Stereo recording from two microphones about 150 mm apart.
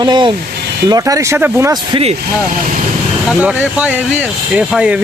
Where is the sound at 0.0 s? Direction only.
30° right (ahead or behind); by 1.7 s 15° right (ahead or behind).